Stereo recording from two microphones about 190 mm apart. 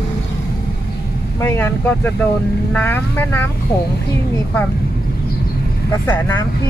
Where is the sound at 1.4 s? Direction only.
10° left (ahead or behind).